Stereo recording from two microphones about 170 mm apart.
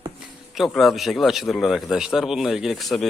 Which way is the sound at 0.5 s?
Centre (ahead or behind).